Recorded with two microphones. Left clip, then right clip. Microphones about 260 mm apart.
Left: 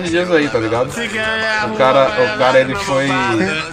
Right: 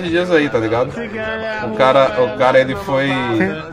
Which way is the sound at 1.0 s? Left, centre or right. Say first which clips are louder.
Left 5 dB; left.